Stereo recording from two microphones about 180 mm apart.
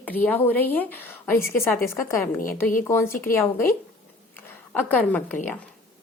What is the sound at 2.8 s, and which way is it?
A woman's voice, 15° left (ahead or behind).